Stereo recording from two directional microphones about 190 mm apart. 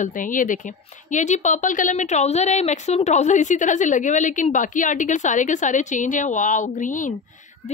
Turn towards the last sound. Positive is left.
turn(degrees=45)  # may be behind; listen again after turning